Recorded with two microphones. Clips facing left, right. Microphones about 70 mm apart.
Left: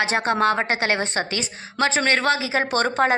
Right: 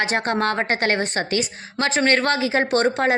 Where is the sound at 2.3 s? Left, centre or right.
Right.